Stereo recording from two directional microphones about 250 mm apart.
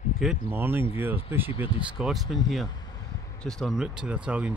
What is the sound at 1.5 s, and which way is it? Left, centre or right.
Speech, centre.